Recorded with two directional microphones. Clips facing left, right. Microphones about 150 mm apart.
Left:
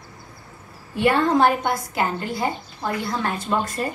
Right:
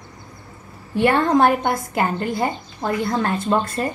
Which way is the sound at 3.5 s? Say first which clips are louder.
Right 3 dB; 40° right (ahead or behind).